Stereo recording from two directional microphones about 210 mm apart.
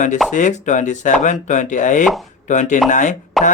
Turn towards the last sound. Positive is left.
turn(degrees=0)  # may be behind; listen again after turning